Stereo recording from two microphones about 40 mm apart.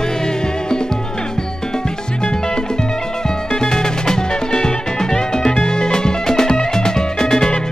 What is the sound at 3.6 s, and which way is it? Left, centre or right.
Music, centre.